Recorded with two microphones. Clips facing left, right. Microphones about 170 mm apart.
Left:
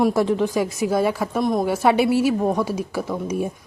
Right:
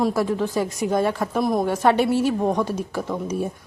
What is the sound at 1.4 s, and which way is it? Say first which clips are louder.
Speech: even; centre (ahead or behind).